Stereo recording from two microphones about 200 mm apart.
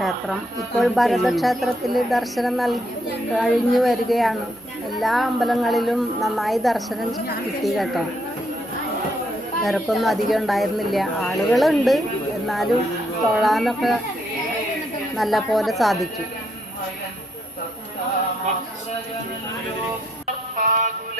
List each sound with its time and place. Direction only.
0.8 s speech: centre (ahead or behind)
9.6 s speech: centre (ahead or behind)
13.3 s speech: centre (ahead or behind)
15.1 s speech: centre (ahead or behind)
20.6 s synthetic singing: 45° right (ahead or behind)